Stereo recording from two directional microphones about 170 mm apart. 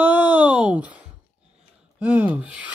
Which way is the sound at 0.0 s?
10° right (ahead or behind).